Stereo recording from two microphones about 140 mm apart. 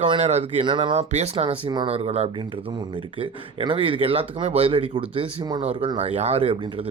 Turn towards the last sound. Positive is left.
turn(degrees=-45)  # may be behind; listen again after turning